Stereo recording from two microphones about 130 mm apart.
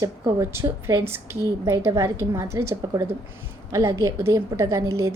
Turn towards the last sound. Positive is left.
turn(degrees=-25)  # may be behind; listen again after turning